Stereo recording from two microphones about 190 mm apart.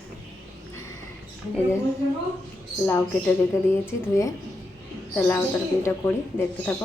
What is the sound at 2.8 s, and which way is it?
Speech, 10° left (ahead or behind).